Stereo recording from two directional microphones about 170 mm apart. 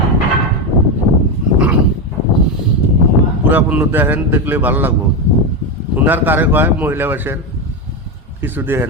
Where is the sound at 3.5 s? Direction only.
10° right (ahead or behind).